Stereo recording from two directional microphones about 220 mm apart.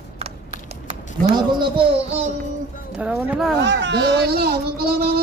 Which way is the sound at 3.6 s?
50° right (ahead or behind).